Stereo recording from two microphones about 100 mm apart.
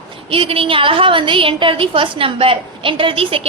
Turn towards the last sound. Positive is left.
turn(degrees=-65)  # may be behind; listen again after turning